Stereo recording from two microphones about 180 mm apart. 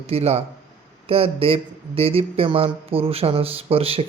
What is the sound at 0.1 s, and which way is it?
Speech, 35° right (ahead or behind).